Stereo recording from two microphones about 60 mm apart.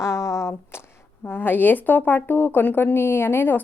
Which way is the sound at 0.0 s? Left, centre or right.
Left.